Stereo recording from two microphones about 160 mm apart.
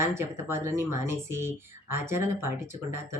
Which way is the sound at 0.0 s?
15° right (ahead or behind).